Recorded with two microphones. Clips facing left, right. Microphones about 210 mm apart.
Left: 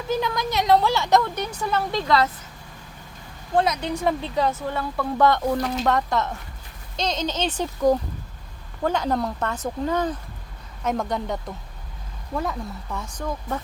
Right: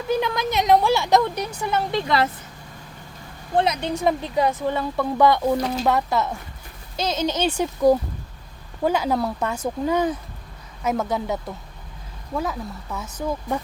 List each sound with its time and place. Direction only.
0.1 s speech: 20° right (ahead or behind)
3.9 s speech: 15° right (ahead or behind)